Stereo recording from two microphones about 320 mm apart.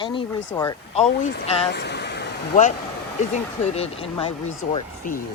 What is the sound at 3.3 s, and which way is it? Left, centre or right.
Speech, centre.